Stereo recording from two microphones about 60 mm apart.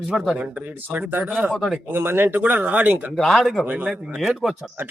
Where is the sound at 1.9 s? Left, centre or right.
Right.